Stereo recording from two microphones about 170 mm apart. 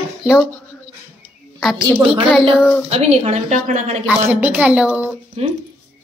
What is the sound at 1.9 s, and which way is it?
A woman's voice, 30° right (ahead or behind).